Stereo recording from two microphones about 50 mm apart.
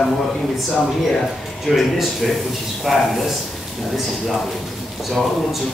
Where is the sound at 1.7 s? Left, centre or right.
Centre.